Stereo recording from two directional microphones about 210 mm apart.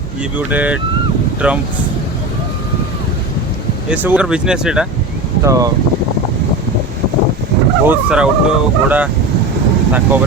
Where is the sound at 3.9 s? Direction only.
5° right (ahead or behind).